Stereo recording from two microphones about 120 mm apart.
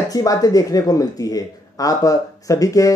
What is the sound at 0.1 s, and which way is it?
Speech, 30° left (ahead or behind).